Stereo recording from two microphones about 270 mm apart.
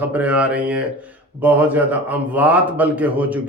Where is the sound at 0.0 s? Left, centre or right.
Centre.